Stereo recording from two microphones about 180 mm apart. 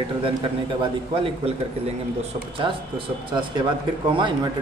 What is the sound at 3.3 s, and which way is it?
Speech, 25° right (ahead or behind).